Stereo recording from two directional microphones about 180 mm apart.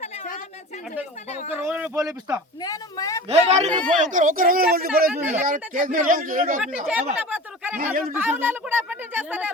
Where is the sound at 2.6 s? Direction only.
20° left (ahead or behind).